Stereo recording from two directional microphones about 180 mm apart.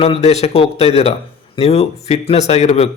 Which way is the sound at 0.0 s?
35° left (ahead or behind).